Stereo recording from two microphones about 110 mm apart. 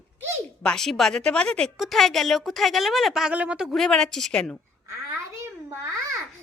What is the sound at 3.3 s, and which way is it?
A woman's voice, 10° right (ahead or behind).